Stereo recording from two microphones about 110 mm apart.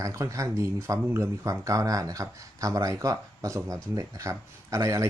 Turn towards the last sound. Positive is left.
turn(degrees=-30)  # may be behind; listen again after turning